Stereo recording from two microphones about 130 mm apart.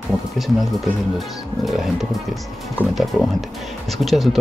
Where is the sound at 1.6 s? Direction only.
Centre (ahead or behind).